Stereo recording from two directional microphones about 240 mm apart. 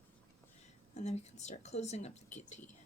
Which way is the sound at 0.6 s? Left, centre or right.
Left.